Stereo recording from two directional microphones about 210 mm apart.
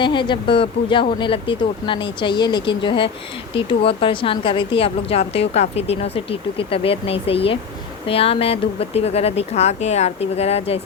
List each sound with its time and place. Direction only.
0.0 s a woman's voice: 20° left (ahead or behind)